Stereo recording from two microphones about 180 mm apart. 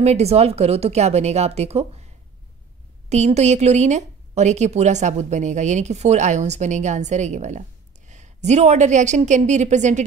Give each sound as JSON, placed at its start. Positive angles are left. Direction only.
{"t": 0.0, "sound": "a woman's voice", "side_deg": -35}
{"t": 3.1, "sound": "a woman's voice", "side_deg": -40}